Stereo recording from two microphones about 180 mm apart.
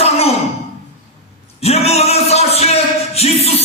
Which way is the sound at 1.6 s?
35° left (ahead or behind).